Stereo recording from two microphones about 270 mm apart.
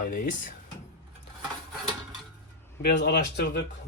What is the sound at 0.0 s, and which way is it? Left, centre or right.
Speech, left.